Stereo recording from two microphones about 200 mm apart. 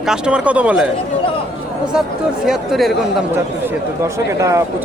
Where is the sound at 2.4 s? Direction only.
Centre (ahead or behind).